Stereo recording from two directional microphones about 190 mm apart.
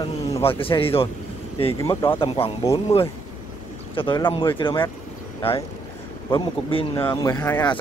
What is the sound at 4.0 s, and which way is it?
Speech, 25° left (ahead or behind).